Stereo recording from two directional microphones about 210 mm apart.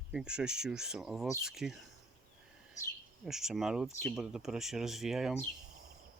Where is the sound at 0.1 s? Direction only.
5° right (ahead or behind).